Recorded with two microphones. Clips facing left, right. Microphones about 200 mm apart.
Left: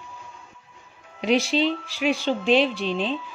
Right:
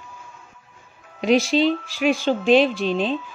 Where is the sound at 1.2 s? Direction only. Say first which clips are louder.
Right 3 dB; 45° right (ahead or behind).